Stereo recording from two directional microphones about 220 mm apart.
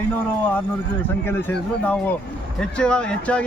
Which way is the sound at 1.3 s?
10° left (ahead or behind).